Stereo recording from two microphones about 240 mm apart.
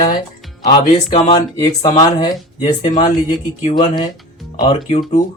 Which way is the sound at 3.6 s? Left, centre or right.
Centre.